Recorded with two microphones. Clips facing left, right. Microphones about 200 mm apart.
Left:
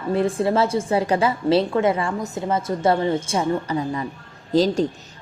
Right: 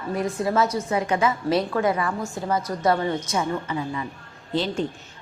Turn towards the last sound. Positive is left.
turn(degrees=40)  # may be behind; listen again after turning